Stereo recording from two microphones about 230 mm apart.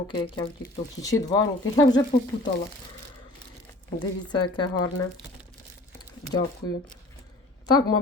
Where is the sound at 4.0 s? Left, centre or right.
Centre.